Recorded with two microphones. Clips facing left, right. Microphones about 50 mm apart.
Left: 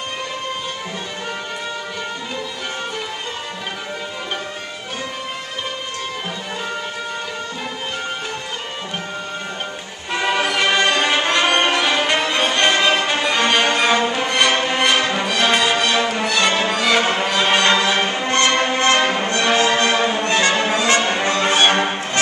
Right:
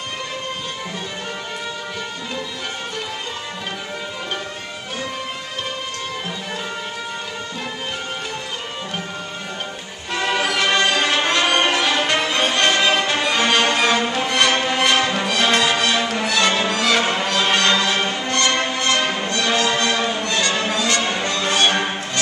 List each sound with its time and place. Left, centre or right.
10.1 s music: centre; by 22.2 s left